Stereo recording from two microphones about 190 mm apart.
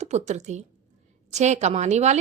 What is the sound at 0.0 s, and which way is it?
A woman's voice, 35° right (ahead or behind).